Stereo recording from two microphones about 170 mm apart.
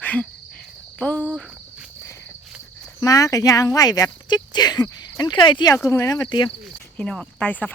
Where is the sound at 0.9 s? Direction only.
5° left (ahead or behind).